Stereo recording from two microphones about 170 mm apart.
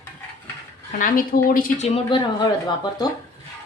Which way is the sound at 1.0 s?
55° left (ahead or behind).